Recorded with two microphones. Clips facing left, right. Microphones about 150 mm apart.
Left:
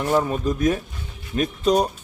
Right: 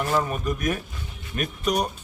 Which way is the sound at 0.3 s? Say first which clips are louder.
Left 5 dB; 30° left (ahead or behind).